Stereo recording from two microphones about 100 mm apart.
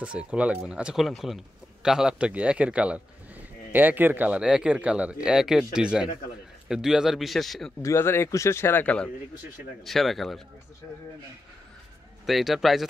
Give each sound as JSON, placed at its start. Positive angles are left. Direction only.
{"t": 0.0, "sound": "a man's voice", "side_deg": -10}
{"t": 7.8, "sound": "speech", "side_deg": 25}
{"t": 8.8, "sound": "speech", "side_deg": 10}
{"t": 12.3, "sound": "speech", "side_deg": 0}